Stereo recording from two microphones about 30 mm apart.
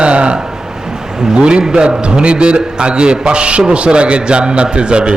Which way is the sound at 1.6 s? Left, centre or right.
Right.